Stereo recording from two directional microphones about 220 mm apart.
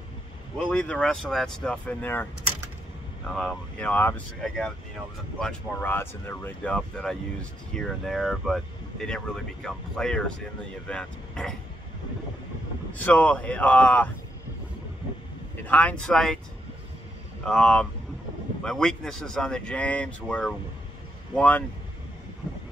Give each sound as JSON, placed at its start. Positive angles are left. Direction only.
{"t": 0.6, "sound": "speech", "side_deg": 5}
{"t": 3.3, "sound": "speech", "side_deg": 5}
{"t": 12.9, "sound": "speech", "side_deg": 5}
{"t": 15.6, "sound": "speech", "side_deg": 5}
{"t": 17.5, "sound": "speech", "side_deg": 5}